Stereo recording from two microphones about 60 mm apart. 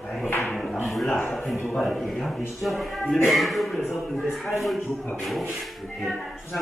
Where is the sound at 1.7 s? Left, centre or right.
Centre.